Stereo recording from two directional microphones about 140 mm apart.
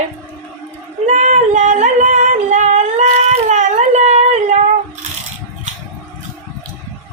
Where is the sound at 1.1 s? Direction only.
60° right (ahead or behind).